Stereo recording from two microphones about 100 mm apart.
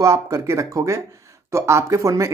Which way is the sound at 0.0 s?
30° right (ahead or behind).